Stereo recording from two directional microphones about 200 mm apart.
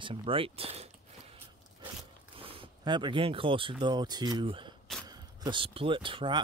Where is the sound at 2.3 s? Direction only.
25° right (ahead or behind).